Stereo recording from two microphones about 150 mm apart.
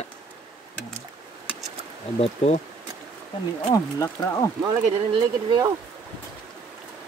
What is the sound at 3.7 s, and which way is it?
Speech, 20° left (ahead or behind).